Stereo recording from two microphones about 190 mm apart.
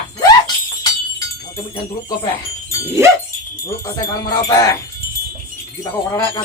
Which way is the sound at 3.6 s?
15° left (ahead or behind).